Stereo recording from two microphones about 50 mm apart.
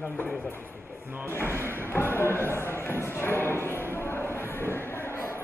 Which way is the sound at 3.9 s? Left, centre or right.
Left.